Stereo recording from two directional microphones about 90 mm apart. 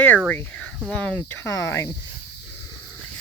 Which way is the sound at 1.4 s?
30° left (ahead or behind).